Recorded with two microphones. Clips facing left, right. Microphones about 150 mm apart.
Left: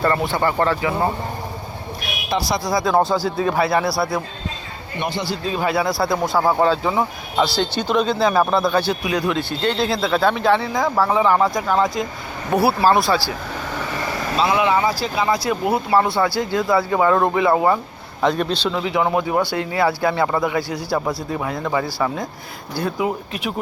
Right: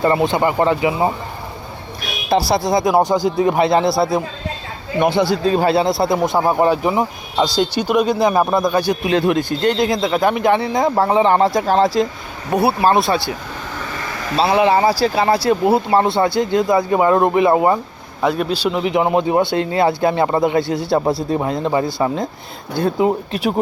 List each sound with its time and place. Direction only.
0.0 s speech: 20° right (ahead or behind)
2.3 s speech: 30° right (ahead or behind)
4.9 s speech: 55° right (ahead or behind); by 5.7 s 40° right (ahead or behind)
5.7 s speech: 25° right (ahead or behind)
9.0 s speech: 25° right (ahead or behind)
9.3 s speech: 15° right (ahead or behind)
14.3 s speech: 35° right (ahead or behind)
18.2 s speech: 5° right (ahead or behind)
18.7 s speech: 20° right (ahead or behind)